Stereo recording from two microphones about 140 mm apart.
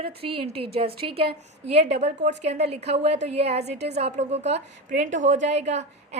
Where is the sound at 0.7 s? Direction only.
45° right (ahead or behind).